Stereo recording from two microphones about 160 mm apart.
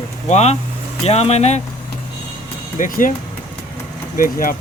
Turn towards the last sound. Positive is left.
turn(degrees=60)  # may be behind; listen again after turning